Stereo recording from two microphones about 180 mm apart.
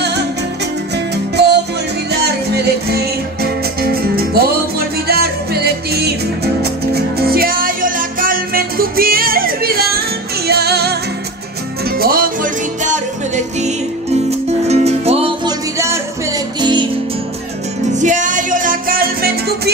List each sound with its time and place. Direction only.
1.4 s music: 70° right (ahead or behind)
12.0 s music: 55° right (ahead or behind)
14.7 s music: 35° right (ahead or behind)
17.9 s music: 45° right (ahead or behind)